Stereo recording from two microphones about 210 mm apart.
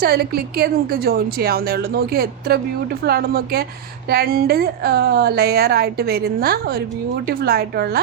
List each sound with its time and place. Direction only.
0.0 s a woman's voice: 50° right (ahead or behind)